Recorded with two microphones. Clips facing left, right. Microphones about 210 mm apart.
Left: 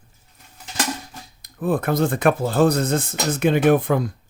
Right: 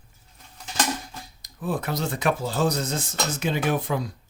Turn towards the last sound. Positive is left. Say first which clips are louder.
# left 8 dB
turn(degrees=55)  # may be behind; listen again after turning